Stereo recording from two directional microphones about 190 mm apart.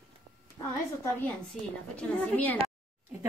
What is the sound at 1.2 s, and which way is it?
A woman's voice, 5° left (ahead or behind).